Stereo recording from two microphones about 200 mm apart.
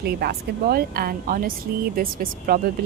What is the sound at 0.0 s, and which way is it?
Speech, 50° right (ahead or behind).